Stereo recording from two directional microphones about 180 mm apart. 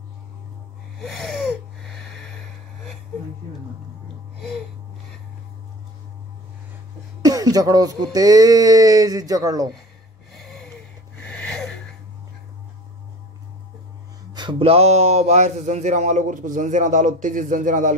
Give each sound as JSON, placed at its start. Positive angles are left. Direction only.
{"t": 0.9, "sound": "wheeze", "side_deg": 0}
{"t": 7.2, "sound": "speech", "side_deg": -20}
{"t": 10.3, "sound": "a sound", "side_deg": 0}
{"t": 11.1, "sound": "wheeze", "side_deg": 5}
{"t": 14.3, "sound": "speech", "side_deg": -25}